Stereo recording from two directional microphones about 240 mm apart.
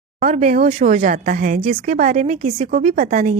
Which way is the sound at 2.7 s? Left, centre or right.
Right.